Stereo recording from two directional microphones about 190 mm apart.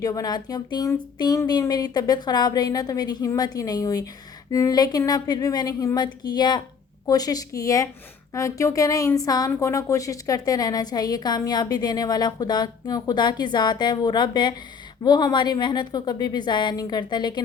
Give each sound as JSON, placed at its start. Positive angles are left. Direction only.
{"t": 0.0, "sound": "a woman's voice", "side_deg": 20}